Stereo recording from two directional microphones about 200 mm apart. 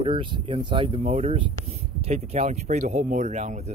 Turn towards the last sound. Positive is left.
turn(degrees=-35)  # may be behind; listen again after turning